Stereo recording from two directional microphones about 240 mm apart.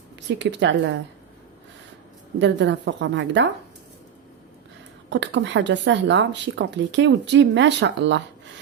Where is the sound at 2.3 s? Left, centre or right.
Right.